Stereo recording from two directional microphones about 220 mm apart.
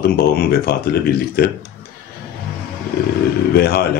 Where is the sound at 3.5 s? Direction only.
45° left (ahead or behind).